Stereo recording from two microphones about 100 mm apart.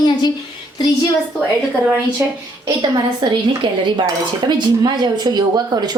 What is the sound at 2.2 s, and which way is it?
Speech, 25° right (ahead or behind).